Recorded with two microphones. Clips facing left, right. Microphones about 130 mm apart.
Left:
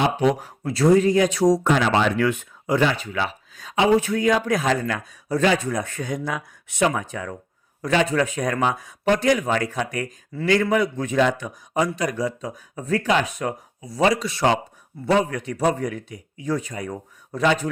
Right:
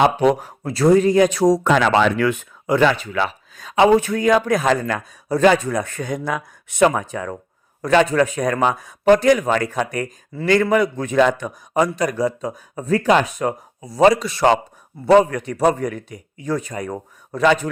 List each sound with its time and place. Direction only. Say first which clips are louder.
0.0 s a man's voice: right 5 dB; 55° right (ahead or behind)
0.6 s speech: right 2 dB; 35° right (ahead or behind)
1.6 s speech: right 4 dB; 75° right (ahead or behind); by 5.5 s 40° right (ahead or behind)
5.5 s a man's voice: right 8 dB; 50° right (ahead or behind)
7.0 s speech: right 4 dB; 35° right (ahead or behind)
7.8 s a man's voice: right 5 dB; 45° right (ahead or behind)
10.4 s a man's voice: right 3 dB; 55° right (ahead or behind)